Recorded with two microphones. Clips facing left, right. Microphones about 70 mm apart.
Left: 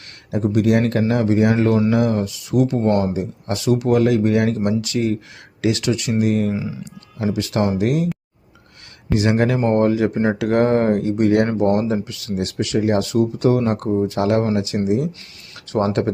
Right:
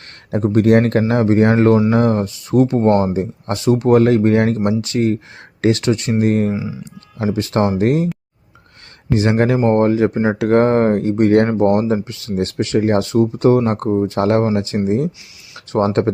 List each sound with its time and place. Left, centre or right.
0.3 s speech: right
9.1 s speech: right